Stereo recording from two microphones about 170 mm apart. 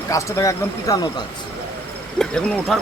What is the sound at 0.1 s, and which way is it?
Speech, 20° left (ahead or behind).